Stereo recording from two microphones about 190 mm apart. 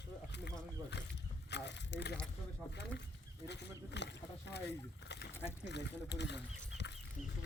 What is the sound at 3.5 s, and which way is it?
Speech, 65° left (ahead or behind).